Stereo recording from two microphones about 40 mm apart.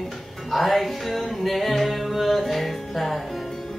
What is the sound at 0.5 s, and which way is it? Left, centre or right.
Music, centre.